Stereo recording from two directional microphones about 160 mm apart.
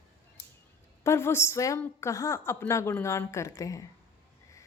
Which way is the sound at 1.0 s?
15° left (ahead or behind).